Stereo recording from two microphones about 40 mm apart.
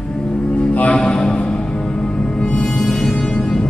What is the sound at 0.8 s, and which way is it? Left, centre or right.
Music, left.